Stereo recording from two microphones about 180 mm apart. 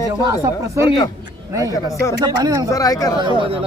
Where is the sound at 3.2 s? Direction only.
25° right (ahead or behind).